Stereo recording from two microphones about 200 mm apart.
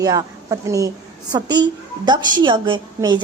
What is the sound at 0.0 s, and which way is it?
A woman's voice, 20° right (ahead or behind).